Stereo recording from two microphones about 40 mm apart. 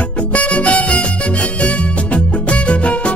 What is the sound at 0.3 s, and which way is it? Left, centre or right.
Music, left.